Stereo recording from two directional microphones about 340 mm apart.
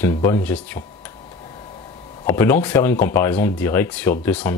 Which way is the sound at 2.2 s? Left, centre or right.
Centre.